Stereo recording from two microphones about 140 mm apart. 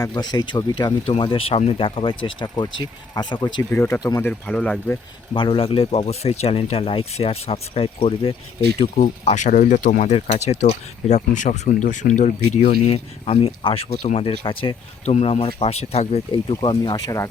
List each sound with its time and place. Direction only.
0.0 s speech: 30° left (ahead or behind)
3.7 s speech: 15° left (ahead or behind)
4.3 s speech: 10° left (ahead or behind)
5.3 s speech: 35° left (ahead or behind)
9.2 s speech: 60° left (ahead or behind)
10.1 s speech: 50° left (ahead or behind)
15.0 s speech: 50° left (ahead or behind); by 17.2 s 30° left (ahead or behind)